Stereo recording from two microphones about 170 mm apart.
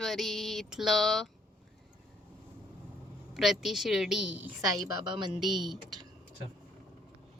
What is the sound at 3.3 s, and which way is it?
Speech, centre (ahead or behind).